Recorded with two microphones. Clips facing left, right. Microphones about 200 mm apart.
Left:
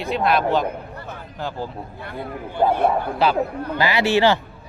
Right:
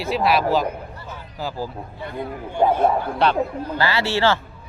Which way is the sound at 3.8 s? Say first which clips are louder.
Left 3 dB; 15° left (ahead or behind).